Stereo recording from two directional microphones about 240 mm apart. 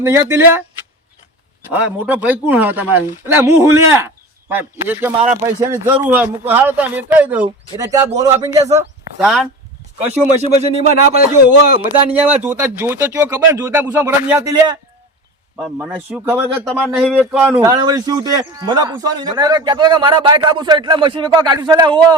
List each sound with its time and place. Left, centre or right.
0.0 s speech: centre
1.7 s speech: centre
9.1 s a man's voice: centre
10.3 s speech: right
12.1 s speech: centre
15.5 s a man's voice: centre